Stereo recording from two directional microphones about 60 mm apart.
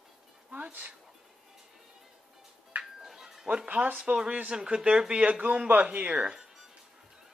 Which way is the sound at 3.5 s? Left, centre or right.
Centre.